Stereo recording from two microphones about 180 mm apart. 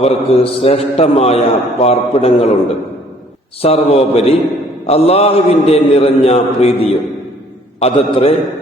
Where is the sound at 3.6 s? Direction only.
35° left (ahead or behind).